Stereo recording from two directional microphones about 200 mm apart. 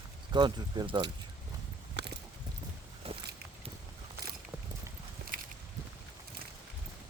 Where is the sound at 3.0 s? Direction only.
30° right (ahead or behind).